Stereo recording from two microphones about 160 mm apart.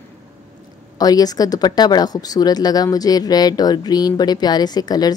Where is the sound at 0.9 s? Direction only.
25° left (ahead or behind).